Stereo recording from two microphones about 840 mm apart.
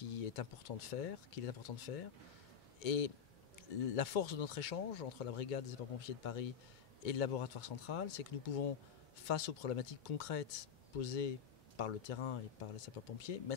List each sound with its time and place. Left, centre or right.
0.1 s speech: left